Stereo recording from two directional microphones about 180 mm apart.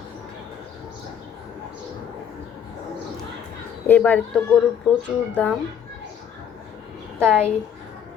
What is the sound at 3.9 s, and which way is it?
Speech, 10° left (ahead or behind).